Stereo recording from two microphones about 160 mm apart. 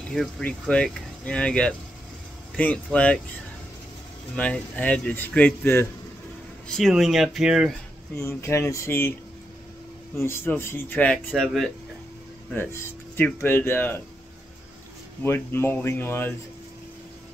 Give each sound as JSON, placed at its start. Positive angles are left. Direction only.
{"t": 0.1, "sound": "speech", "side_deg": 5}
{"t": 4.4, "sound": "speech", "side_deg": 10}
{"t": 6.7, "sound": "speech", "side_deg": 0}
{"t": 8.2, "sound": "speech", "side_deg": 15}
{"t": 10.1, "sound": "speech", "side_deg": 15}
{"t": 12.5, "sound": "speech", "side_deg": 15}
{"t": 15.2, "sound": "speech", "side_deg": 15}